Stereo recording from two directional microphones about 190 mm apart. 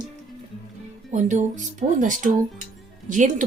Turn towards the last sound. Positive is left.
turn(degrees=-40)  # may be behind; listen again after turning